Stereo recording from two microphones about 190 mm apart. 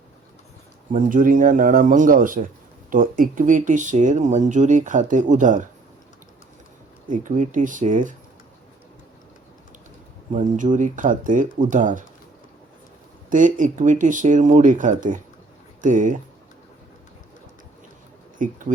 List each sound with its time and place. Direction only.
0.9 s speech: 45° right (ahead or behind)
7.1 s speech: 40° right (ahead or behind)
10.3 s speech: 40° right (ahead or behind)
13.3 s speech: 45° right (ahead or behind)
18.4 s speech: 45° right (ahead or behind)